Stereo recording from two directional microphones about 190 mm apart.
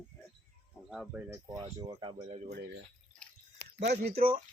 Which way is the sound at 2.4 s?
60° right (ahead or behind).